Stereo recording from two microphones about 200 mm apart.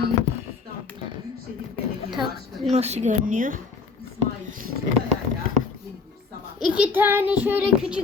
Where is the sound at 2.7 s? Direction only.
35° right (ahead or behind).